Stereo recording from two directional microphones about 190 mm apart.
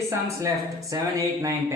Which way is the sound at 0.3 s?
15° right (ahead or behind).